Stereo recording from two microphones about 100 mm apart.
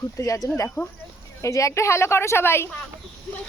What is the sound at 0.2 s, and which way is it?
Speech, 35° left (ahead or behind).